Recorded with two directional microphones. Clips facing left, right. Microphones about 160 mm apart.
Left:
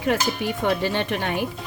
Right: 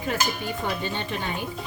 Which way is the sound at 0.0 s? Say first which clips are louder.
Left 5 dB; 75° left (ahead or behind).